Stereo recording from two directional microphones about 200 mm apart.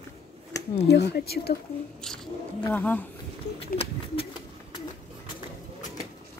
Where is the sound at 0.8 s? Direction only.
55° left (ahead or behind).